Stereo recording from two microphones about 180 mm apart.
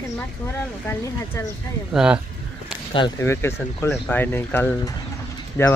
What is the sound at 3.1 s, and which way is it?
Speech, 15° left (ahead or behind).